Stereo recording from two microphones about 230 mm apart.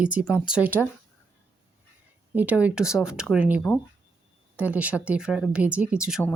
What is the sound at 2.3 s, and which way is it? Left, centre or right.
Speech, centre.